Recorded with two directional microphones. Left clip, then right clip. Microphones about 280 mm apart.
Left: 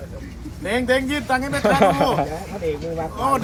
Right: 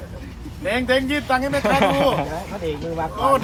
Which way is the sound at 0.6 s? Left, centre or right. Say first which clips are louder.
Even; centre.